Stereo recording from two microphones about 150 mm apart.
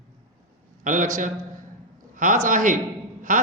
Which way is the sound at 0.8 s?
60° right (ahead or behind).